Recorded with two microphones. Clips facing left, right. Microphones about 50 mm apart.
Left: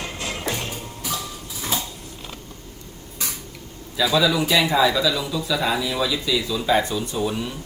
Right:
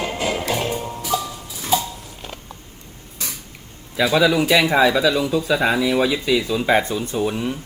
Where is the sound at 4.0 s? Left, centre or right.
Right.